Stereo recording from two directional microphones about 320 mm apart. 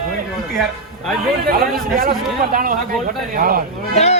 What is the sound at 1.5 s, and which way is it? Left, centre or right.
Speech, right.